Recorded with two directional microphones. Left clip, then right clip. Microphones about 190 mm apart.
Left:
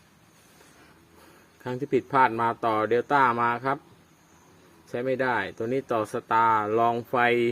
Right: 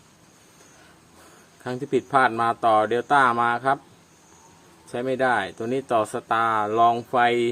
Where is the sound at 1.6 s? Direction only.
5° left (ahead or behind).